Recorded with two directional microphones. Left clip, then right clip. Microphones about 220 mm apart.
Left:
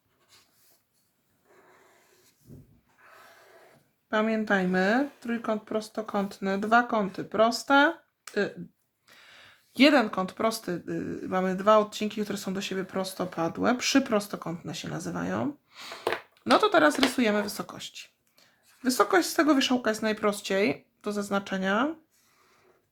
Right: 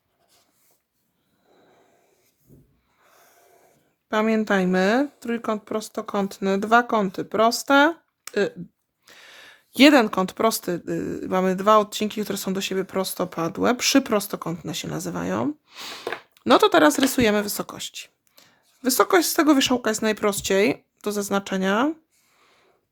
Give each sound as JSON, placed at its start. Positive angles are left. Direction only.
{"t": 4.1, "sound": "speech", "side_deg": -45}